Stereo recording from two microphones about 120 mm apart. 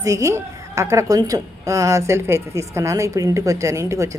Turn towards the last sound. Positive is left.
turn(degrees=-25)  # may be behind; listen again after turning